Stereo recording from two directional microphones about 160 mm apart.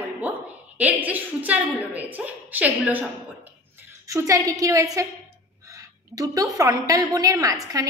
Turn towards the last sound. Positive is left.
turn(degrees=-20)  # may be behind; listen again after turning